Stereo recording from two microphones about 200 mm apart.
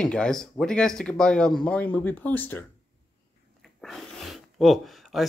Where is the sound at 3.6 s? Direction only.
Centre (ahead or behind).